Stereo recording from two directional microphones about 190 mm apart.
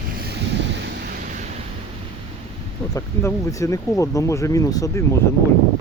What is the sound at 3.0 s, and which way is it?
Speech, 15° left (ahead or behind).